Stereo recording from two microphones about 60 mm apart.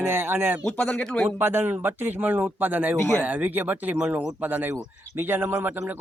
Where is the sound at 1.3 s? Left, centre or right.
Right.